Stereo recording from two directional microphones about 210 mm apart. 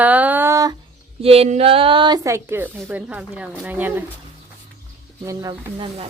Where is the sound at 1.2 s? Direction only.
30° right (ahead or behind); by 4.0 s 10° right (ahead or behind).